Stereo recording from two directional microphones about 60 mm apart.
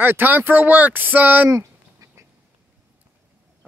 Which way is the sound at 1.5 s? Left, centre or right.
Right.